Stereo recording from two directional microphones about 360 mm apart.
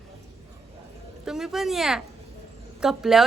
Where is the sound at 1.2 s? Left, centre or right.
Centre.